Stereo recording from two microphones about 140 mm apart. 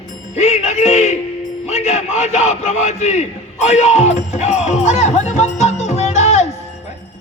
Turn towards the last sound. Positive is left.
turn(degrees=55)  # may be behind; listen again after turning